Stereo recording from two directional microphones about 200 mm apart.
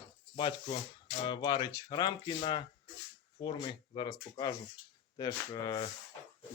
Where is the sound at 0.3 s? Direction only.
25° left (ahead or behind).